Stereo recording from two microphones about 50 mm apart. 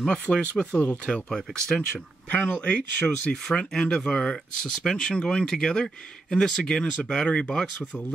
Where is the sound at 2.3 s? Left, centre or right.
Centre.